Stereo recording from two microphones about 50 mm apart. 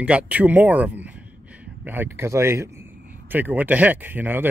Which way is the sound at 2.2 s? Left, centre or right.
Right.